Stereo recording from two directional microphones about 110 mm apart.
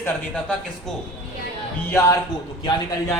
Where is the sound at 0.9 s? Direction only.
5° left (ahead or behind).